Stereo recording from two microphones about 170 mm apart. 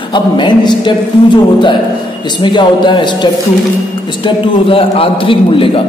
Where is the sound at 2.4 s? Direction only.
25° left (ahead or behind).